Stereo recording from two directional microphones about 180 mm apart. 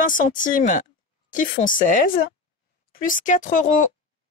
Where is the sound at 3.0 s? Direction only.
45° left (ahead or behind).